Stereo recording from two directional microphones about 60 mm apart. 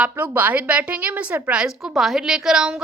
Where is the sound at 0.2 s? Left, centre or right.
Right.